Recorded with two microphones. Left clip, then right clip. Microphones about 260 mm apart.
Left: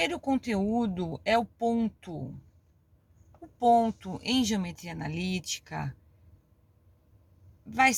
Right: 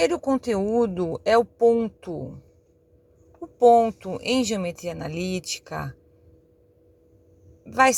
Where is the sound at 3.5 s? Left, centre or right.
Centre.